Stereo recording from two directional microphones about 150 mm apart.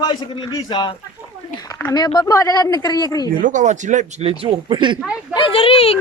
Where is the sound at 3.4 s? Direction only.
55° right (ahead or behind).